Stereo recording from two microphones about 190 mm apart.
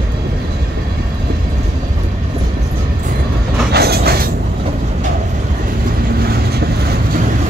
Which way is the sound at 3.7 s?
55° right (ahead or behind).